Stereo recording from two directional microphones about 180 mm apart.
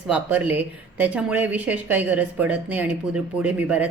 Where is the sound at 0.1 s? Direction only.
10° right (ahead or behind).